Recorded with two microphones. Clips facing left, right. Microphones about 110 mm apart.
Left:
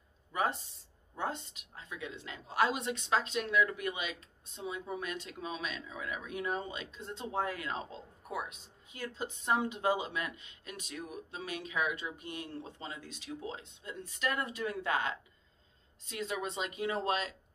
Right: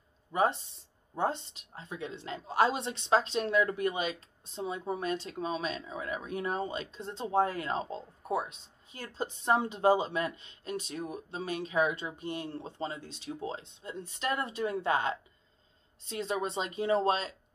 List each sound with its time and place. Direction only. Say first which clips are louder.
0.3 s speech: right 5 dB; 25° right (ahead or behind)